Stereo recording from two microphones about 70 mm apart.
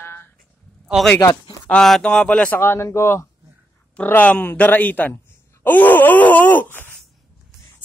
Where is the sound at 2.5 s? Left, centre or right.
Left.